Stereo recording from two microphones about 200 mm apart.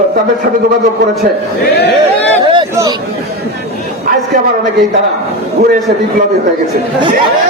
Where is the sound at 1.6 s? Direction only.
55° left (ahead or behind).